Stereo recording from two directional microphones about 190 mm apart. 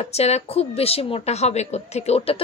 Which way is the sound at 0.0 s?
35° left (ahead or behind).